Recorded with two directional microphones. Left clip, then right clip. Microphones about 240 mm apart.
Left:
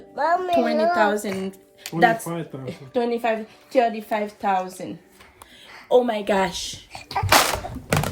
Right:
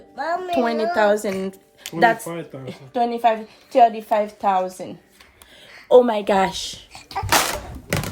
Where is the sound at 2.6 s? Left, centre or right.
Centre.